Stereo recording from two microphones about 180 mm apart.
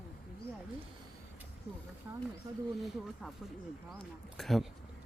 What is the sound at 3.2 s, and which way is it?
Speech, 5° right (ahead or behind).